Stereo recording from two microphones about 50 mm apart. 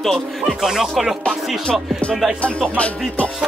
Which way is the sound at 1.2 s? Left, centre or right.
Left.